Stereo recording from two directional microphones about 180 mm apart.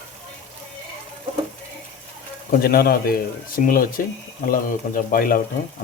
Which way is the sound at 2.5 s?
60° left (ahead or behind).